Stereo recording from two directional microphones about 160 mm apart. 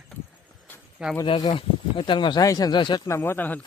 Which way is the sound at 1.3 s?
30° left (ahead or behind).